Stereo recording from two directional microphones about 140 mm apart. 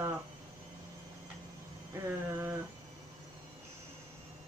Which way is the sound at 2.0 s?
20° right (ahead or behind).